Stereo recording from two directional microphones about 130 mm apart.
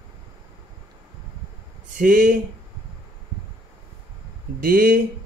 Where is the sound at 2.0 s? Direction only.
90° right.